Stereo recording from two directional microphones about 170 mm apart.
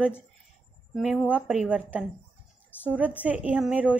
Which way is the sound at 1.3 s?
5° right (ahead or behind).